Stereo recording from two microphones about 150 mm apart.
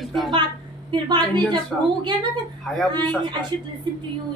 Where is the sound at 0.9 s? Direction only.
30° right (ahead or behind).